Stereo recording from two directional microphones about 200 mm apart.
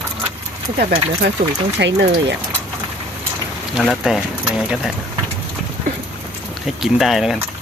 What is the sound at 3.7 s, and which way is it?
Speech, centre (ahead or behind).